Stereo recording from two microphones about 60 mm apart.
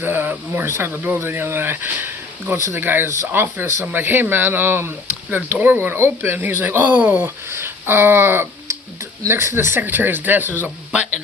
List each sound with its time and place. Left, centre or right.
0.0 s speech: right
9.8 s speech: right
10.9 s speech: right